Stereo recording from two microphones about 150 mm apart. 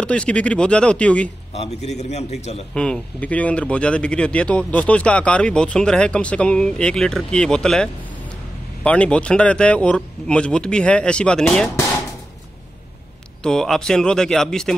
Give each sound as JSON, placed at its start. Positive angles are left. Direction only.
{"t": 0.0, "sound": "speech", "side_deg": 10}
{"t": 1.5, "sound": "a man's voice", "side_deg": 45}
{"t": 2.7, "sound": "speech", "side_deg": 5}
{"t": 13.4, "sound": "speech", "side_deg": 5}